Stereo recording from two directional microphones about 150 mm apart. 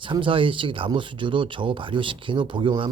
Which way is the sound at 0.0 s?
35° right (ahead or behind).